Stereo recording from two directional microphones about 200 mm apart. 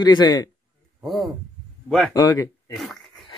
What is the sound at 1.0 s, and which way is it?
Speech, centre (ahead or behind).